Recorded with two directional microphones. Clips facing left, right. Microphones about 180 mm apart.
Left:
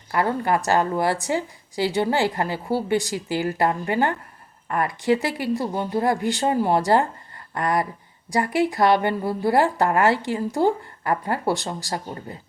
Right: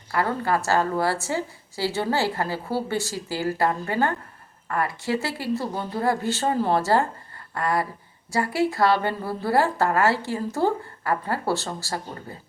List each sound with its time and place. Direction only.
0.1 s a woman's voice: 20° left (ahead or behind)